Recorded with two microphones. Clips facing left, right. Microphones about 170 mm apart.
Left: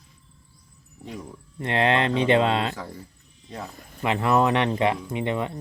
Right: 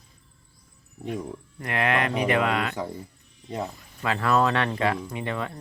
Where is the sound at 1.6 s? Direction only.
25° left (ahead or behind).